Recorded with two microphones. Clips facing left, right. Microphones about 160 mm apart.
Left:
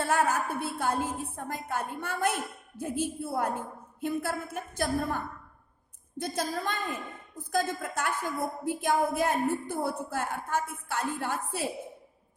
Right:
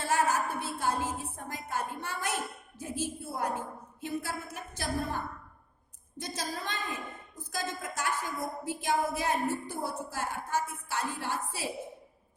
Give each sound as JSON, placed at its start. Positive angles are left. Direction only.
{"t": 0.0, "sound": "a woman's voice", "side_deg": 55}